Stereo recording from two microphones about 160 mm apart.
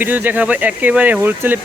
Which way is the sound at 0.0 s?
10° right (ahead or behind).